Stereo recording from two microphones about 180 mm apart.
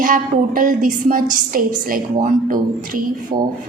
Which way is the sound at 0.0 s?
50° right (ahead or behind).